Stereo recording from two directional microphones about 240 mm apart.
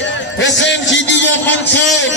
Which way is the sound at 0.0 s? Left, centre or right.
Left.